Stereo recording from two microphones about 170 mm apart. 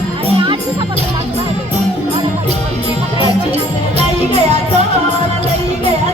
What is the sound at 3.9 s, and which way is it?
Music, 40° right (ahead or behind).